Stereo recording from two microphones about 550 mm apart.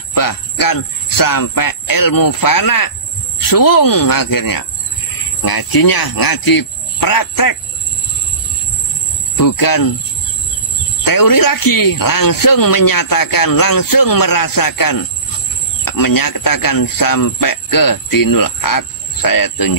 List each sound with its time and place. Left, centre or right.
0.1 s a man's voice: left
9.4 s a man's voice: left
11.1 s a man's voice: left